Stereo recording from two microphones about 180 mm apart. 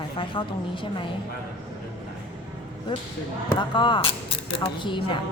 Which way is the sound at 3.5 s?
25° left (ahead or behind).